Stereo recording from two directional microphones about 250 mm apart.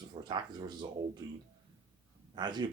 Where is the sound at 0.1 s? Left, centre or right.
Centre.